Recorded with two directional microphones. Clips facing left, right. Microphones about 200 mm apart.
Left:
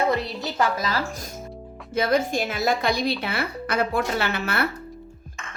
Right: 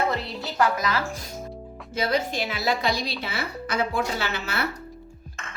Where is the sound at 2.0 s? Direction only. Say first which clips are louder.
Left 3 dB; 50° left (ahead or behind).